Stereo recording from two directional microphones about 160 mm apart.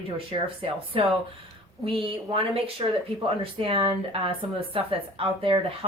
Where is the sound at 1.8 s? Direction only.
35° right (ahead or behind).